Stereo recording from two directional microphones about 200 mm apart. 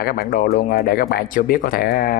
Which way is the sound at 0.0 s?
45° left (ahead or behind).